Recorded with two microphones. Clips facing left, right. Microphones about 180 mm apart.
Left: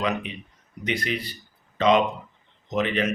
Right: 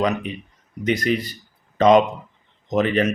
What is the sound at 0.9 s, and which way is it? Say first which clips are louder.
Speech: right 7 dB; 45° right (ahead or behind).